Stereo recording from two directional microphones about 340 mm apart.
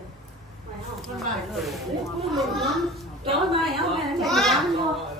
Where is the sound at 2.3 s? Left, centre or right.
Centre.